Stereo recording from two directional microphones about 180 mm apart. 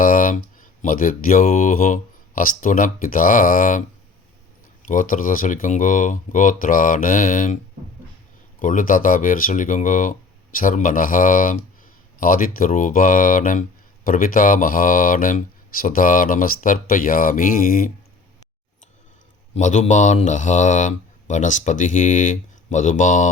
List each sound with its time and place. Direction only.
0.0 s speech: 50° left (ahead or behind)
4.9 s speech: 50° left (ahead or behind)
19.5 s speech: 40° left (ahead or behind)